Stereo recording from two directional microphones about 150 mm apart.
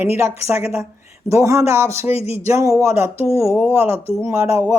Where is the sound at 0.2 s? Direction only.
15° right (ahead or behind).